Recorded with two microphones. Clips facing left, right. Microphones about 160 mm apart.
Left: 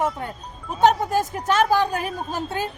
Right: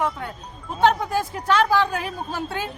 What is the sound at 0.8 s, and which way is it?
A woman's voice, 45° left (ahead or behind).